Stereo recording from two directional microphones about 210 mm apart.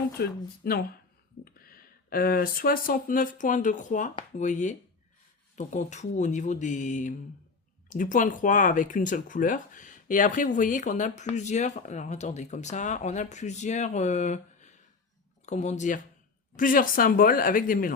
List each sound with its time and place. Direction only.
0.2 s speech: 50° left (ahead or behind)